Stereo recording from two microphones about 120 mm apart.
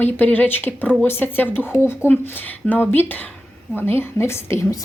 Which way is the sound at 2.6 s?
15° left (ahead or behind).